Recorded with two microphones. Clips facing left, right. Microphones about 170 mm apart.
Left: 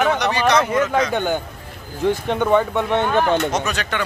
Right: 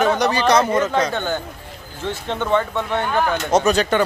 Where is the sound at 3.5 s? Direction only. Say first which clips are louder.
Right 7 dB; 35° right (ahead or behind).